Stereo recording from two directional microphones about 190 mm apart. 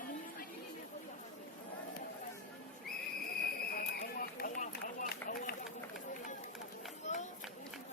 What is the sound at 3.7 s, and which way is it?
Run, 50° left (ahead or behind).